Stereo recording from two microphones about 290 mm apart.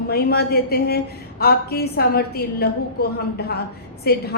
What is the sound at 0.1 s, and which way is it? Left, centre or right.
A woman's voice, left.